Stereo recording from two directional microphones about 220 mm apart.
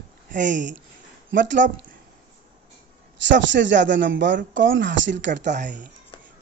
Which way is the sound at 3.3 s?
55° right (ahead or behind).